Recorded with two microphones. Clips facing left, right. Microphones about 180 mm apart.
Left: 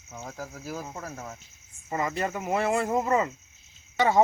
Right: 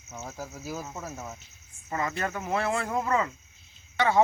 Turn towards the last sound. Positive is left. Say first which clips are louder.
# left 1 dB
turn(degrees=10)  # may be behind; listen again after turning